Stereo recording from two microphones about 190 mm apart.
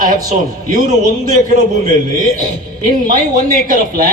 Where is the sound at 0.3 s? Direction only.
45° right (ahead or behind).